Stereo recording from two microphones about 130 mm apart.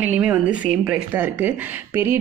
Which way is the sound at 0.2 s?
10° right (ahead or behind).